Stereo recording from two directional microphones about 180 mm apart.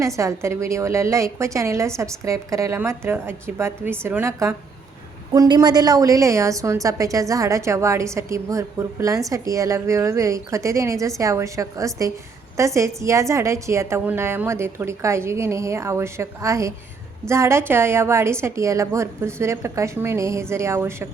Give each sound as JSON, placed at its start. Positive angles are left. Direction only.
{"t": 0.0, "sound": "a woman's voice", "side_deg": -15}